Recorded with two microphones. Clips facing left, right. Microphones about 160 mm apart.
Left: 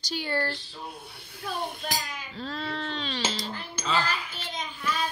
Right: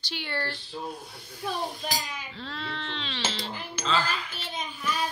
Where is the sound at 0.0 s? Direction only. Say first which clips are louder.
Left 4 dB; 40° left (ahead or behind).